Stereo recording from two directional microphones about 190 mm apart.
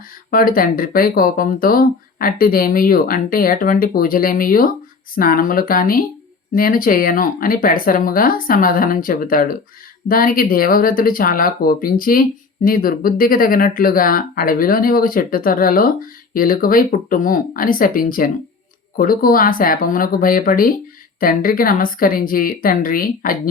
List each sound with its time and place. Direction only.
0.3 s speech: 50° left (ahead or behind)